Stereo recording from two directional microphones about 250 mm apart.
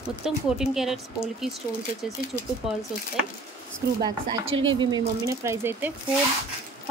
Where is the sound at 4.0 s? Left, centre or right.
Right.